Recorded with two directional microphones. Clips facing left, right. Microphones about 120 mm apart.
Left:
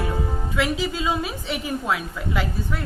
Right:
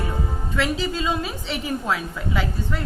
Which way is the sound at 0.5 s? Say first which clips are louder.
Right 1 dB; 5° left (ahead or behind).